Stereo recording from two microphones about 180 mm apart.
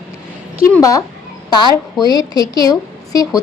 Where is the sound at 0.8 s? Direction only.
20° left (ahead or behind).